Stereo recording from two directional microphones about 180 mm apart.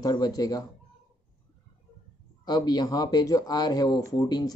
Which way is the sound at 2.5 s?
25° left (ahead or behind).